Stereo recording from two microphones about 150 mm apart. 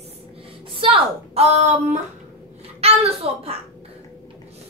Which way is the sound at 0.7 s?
40° right (ahead or behind).